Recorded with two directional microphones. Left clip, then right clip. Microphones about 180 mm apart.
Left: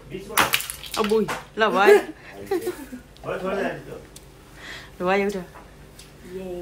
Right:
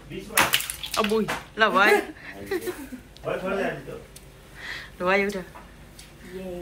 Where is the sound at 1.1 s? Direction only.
20° left (ahead or behind).